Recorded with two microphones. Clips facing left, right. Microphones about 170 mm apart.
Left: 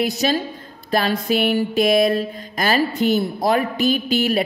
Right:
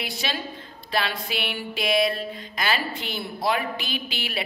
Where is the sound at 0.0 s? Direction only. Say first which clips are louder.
Left 11 dB; 40° left (ahead or behind).